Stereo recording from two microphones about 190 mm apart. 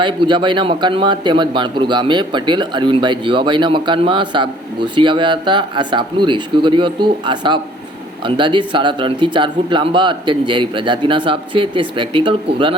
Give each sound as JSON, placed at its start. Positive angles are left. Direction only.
{"t": 0.0, "sound": "speech", "side_deg": -25}